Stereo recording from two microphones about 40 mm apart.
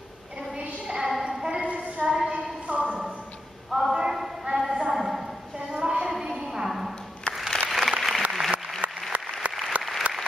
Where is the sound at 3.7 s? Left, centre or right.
Centre.